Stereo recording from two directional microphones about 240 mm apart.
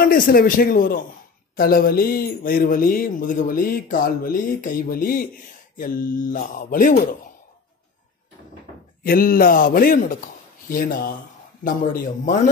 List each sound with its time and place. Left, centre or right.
0.0 s speech: left
9.0 s speech: left